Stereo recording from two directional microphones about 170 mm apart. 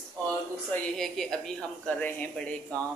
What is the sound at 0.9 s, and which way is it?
A man's voice, 5° left (ahead or behind).